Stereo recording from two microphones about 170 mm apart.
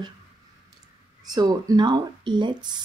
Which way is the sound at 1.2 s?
25° right (ahead or behind).